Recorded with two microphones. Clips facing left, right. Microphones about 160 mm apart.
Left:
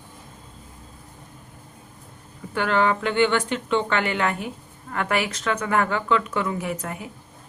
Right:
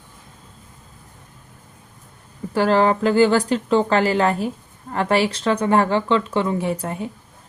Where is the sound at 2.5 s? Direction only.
35° right (ahead or behind).